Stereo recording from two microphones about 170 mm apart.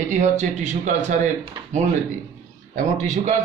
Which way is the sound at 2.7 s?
45° right (ahead or behind).